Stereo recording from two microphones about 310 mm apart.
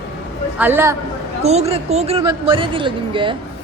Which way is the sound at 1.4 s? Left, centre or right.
Centre.